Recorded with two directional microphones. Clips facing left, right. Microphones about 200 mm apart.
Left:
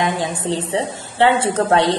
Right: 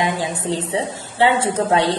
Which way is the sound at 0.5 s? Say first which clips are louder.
Left 1 dB; 30° left (ahead or behind).